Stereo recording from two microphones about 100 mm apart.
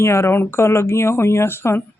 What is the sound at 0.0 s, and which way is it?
Speech, 25° left (ahead or behind).